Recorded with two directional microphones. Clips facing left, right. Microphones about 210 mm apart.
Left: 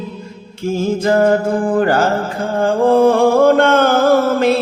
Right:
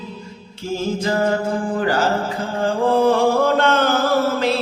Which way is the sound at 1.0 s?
50° left (ahead or behind).